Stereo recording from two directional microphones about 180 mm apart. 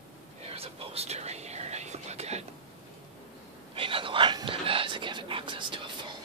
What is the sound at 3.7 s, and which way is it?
Whispering, 30° right (ahead or behind).